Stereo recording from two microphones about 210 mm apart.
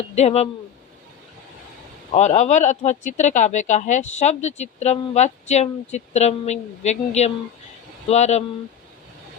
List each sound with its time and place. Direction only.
0.0 s speech: 30° left (ahead or behind)
2.1 s speech: 35° left (ahead or behind)